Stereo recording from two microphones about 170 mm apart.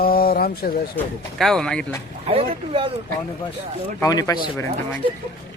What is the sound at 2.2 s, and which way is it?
Speech, 30° right (ahead or behind).